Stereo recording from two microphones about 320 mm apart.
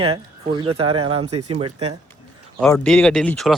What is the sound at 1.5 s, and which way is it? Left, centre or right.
Speech, centre.